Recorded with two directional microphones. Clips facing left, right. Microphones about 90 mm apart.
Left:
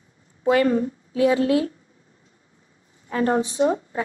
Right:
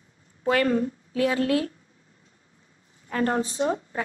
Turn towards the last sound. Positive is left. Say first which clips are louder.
# left 5 dB
turn(degrees=25)  # may be behind; listen again after turning